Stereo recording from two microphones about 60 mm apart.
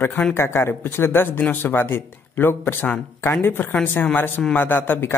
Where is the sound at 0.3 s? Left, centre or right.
Left.